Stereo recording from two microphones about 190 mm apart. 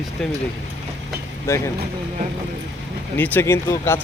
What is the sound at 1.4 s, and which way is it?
Speech, 15° left (ahead or behind).